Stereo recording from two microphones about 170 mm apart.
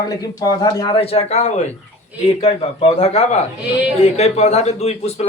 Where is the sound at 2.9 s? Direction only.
40° left (ahead or behind).